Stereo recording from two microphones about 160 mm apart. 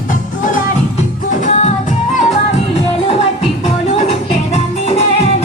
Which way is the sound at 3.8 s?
45° left (ahead or behind).